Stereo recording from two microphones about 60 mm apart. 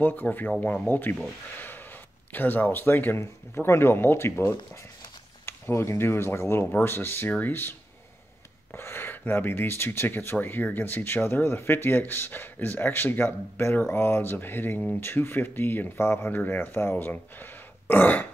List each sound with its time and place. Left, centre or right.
0.0 s speech: left
8.7 s speech: left